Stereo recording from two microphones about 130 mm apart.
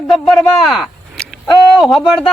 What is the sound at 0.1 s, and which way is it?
Speech, centre (ahead or behind).